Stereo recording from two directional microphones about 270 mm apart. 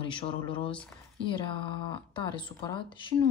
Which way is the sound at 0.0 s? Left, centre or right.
Centre.